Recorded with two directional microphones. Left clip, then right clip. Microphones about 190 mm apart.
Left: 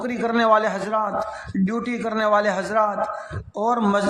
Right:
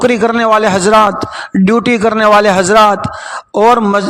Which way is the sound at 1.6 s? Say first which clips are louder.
Right 17 dB; 45° right (ahead or behind).